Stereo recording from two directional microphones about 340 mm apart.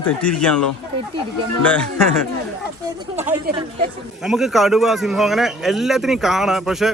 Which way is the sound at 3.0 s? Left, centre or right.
Centre.